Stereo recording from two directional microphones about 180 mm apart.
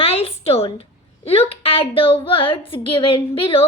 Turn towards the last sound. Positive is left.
turn(degrees=30)  # may be behind; listen again after turning